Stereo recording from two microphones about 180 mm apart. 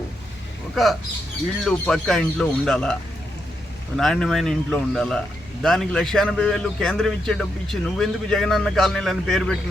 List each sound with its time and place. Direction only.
0.8 s a man's voice: centre (ahead or behind)
3.9 s a man's voice: centre (ahead or behind)